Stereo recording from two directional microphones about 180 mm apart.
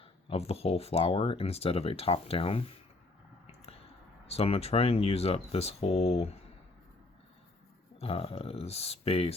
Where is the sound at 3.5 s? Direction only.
35° left (ahead or behind).